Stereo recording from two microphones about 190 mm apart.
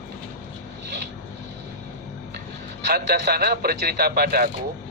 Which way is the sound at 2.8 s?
55° right (ahead or behind).